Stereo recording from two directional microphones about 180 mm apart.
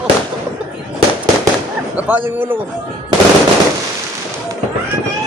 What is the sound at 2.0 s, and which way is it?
Speech, 10° right (ahead or behind).